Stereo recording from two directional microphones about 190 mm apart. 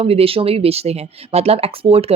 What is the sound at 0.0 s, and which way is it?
Speech, 30° right (ahead or behind).